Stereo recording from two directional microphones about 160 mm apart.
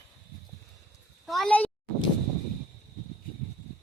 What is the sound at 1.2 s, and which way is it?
Speech, centre (ahead or behind).